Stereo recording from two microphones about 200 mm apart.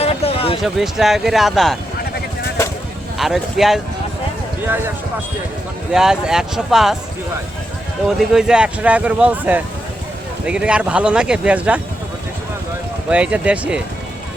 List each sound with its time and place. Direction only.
0.0 s a sound: 30° left (ahead or behind)
0.6 s speech: centre (ahead or behind)
3.2 s speech: centre (ahead or behind)
5.9 s speech: 5° right (ahead or behind)
8.2 s speech: centre (ahead or behind)
13.1 s speech: 5° right (ahead or behind)